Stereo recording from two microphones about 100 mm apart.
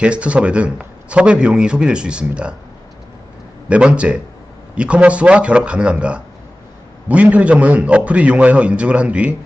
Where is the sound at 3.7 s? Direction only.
10° right (ahead or behind).